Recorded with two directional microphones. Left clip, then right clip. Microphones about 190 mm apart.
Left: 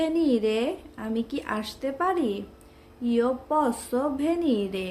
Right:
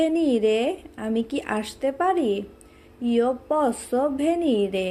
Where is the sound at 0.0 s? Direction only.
15° right (ahead or behind).